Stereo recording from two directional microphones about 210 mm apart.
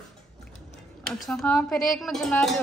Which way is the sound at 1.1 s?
Centre (ahead or behind).